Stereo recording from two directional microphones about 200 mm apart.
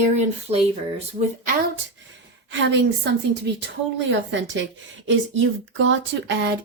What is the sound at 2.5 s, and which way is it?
Speech, 65° right (ahead or behind).